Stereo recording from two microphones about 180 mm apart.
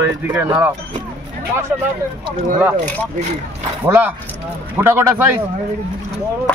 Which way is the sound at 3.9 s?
10° right (ahead or behind).